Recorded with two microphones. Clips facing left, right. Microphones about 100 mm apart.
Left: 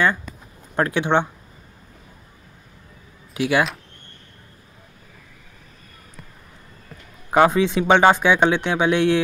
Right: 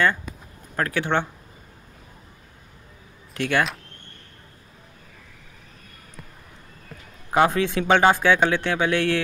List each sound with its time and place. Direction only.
0.7 s speech: 20° left (ahead or behind)
3.3 s a man's voice: 10° left (ahead or behind)
7.2 s a man's voice: 20° left (ahead or behind)